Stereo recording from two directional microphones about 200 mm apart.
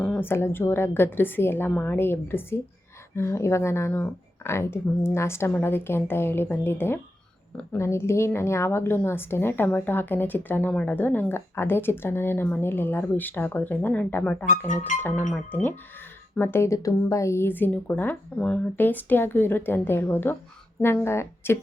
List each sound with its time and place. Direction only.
0.0 s a woman's voice: 10° left (ahead or behind)
14.7 s music: 40° left (ahead or behind)
16.3 s a woman's voice: 10° left (ahead or behind)